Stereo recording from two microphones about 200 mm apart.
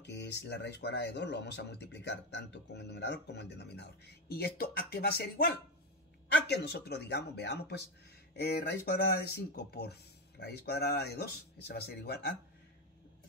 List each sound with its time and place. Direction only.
0.0 s speech: 60° left (ahead or behind)